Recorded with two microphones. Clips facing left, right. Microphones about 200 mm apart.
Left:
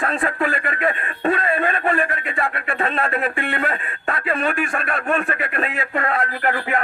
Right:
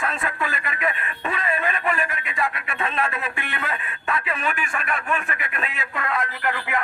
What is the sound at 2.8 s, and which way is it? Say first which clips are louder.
Speech: left 4 dB; 35° left (ahead or behind).